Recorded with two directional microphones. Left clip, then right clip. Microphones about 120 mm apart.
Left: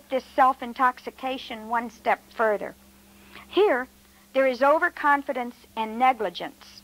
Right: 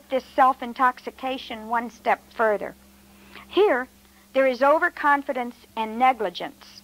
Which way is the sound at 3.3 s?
40° left (ahead or behind).